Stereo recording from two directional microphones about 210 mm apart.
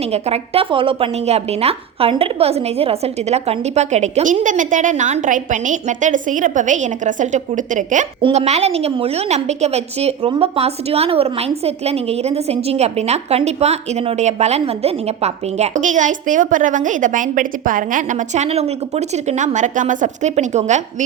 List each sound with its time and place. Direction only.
0.1 s a woman's voice: 30° right (ahead or behind)